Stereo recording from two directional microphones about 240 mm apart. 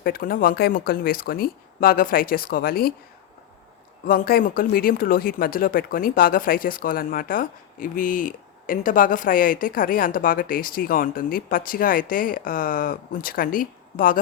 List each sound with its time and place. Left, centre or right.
0.0 s speech: left
4.0 s speech: left